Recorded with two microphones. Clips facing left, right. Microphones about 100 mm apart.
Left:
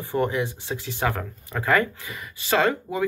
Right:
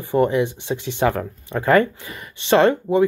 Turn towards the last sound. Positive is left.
turn(degrees=-30)  # may be behind; listen again after turning